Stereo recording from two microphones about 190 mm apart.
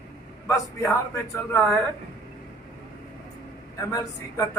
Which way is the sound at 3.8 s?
15° left (ahead or behind).